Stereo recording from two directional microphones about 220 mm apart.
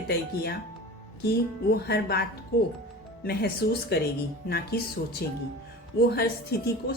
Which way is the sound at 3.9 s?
50° left (ahead or behind).